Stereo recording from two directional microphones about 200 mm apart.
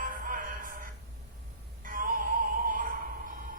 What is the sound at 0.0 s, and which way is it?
Music, 45° right (ahead or behind).